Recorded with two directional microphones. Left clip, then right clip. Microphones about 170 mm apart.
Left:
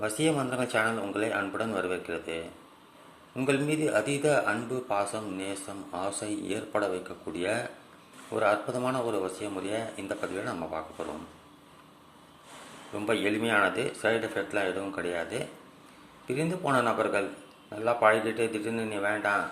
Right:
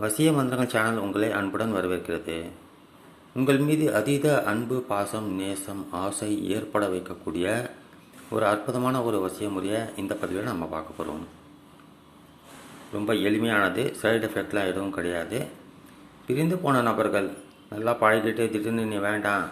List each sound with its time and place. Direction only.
0.0 s speech: 15° right (ahead or behind)
12.9 s speech: 5° right (ahead or behind)